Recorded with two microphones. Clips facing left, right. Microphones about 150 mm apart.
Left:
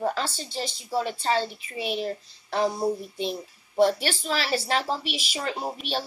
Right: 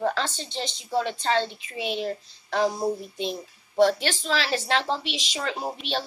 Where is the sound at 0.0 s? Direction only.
5° left (ahead or behind).